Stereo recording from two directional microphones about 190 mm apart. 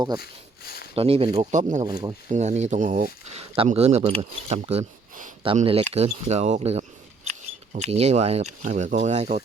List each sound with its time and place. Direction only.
0.2 s speech: 55° left (ahead or behind)
0.9 s speech: 30° right (ahead or behind)
1.9 s speech: 20° right (ahead or behind)
2.3 s speech: 40° right (ahead or behind)